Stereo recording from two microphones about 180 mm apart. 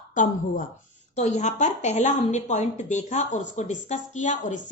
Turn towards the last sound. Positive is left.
turn(degrees=45)  # may be behind; listen again after turning